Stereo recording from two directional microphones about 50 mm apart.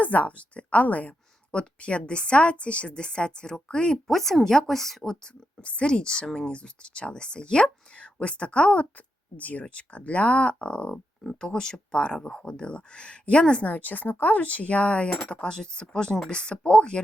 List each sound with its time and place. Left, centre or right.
0.0 s speech: left
4.0 s speech: centre
5.2 s speech: left
13.7 s speech: left